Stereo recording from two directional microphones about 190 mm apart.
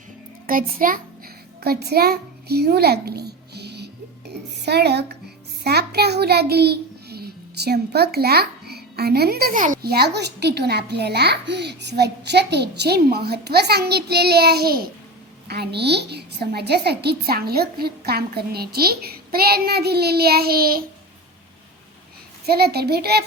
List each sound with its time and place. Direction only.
0.4 s a child's voice: 50° right (ahead or behind)
4.3 s a sound: 60° right (ahead or behind)
5.6 s a child's voice: 60° right (ahead or behind)
22.4 s a child's voice: 55° right (ahead or behind)